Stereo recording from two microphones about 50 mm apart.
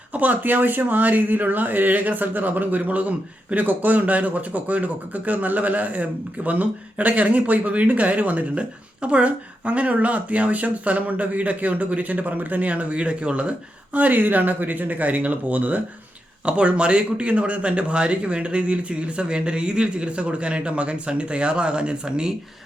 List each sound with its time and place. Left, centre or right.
0.1 s speech: right
13.9 s speech: right; by 22.3 s centre